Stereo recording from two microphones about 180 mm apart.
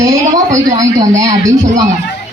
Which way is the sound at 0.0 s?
20° right (ahead or behind).